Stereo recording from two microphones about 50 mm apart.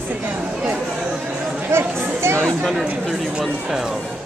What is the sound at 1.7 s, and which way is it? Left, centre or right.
Chatter, right.